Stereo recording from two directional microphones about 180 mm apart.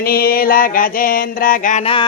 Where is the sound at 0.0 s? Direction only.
55° left (ahead or behind).